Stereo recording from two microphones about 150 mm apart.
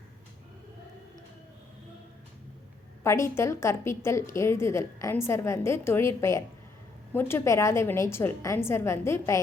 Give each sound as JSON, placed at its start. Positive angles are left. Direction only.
{"t": 3.0, "sound": "a woman's voice", "side_deg": 20}